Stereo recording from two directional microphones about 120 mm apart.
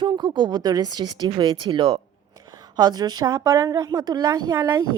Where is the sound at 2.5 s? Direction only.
35° right (ahead or behind).